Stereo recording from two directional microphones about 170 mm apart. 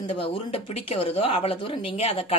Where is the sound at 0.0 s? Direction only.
35° left (ahead or behind).